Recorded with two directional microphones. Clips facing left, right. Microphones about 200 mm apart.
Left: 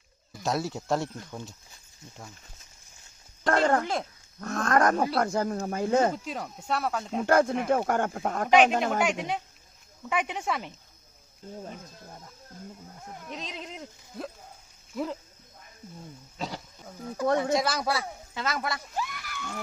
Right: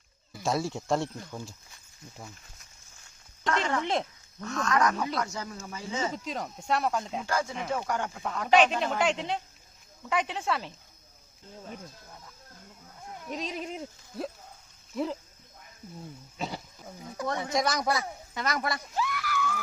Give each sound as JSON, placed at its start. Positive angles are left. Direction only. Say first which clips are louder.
{"t": 0.3, "sound": "a man's voice", "louder": "even", "side_deg": 0}
{"t": 3.4, "sound": "a sound", "louder": "left 5 dB", "side_deg": 50}
{"t": 4.4, "sound": "speech", "louder": "left 3 dB", "side_deg": 55}
{"t": 6.2, "sound": "a man's voice", "louder": "right 1 dB", "side_deg": 5}
{"t": 7.3, "sound": "speech", "louder": "left 11 dB", "side_deg": 60}
{"t": 9.0, "sound": "speech", "louder": "left 1 dB", "side_deg": 15}
{"t": 13.2, "sound": "a man's voice", "louder": "right 5 dB", "side_deg": -10}
{"t": 16.4, "sound": "goat", "louder": "even", "side_deg": 0}
{"t": 17.6, "sound": "a man's voice", "louder": "even", "side_deg": 5}
{"t": 18.9, "sound": "a sound", "louder": "right 4 dB", "side_deg": 20}